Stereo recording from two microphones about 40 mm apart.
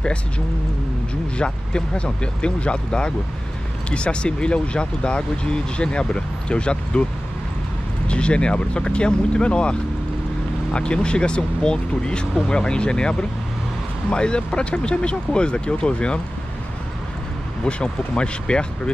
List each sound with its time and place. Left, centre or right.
1.4 s speech: left
8.1 s speech: left
17.8 s speech: left